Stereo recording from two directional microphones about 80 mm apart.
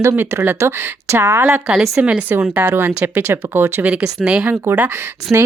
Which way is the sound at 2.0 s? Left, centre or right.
Centre.